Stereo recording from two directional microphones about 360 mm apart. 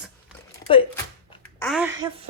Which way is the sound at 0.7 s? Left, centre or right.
Centre.